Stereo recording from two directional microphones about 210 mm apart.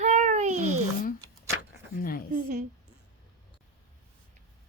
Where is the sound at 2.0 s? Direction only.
45° left (ahead or behind).